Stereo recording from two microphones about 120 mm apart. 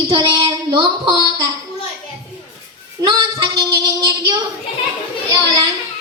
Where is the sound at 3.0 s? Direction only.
40° right (ahead or behind).